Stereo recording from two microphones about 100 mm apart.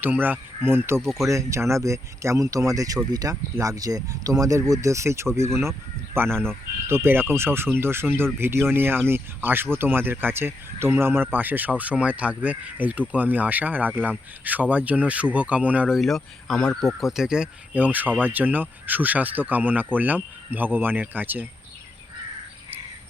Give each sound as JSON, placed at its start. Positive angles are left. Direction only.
{"t": 0.0, "sound": "speech", "side_deg": -20}
{"t": 6.3, "sound": "speech", "side_deg": 5}
{"t": 6.8, "sound": "speech", "side_deg": -25}
{"t": 16.0, "sound": "speech", "side_deg": 0}